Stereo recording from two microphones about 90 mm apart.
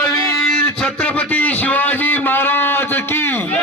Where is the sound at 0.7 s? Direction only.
10° left (ahead or behind).